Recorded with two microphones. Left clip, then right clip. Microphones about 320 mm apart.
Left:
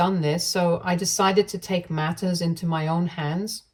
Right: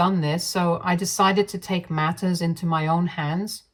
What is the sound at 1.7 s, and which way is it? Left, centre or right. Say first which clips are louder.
Speech: right 1 dB; centre.